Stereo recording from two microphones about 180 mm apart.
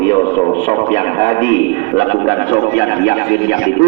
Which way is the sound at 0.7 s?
30° left (ahead or behind).